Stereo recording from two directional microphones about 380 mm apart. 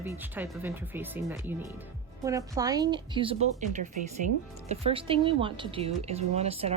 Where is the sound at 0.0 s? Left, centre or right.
Centre.